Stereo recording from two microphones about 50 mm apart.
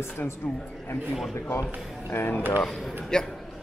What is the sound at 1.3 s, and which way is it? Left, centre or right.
Speech, left.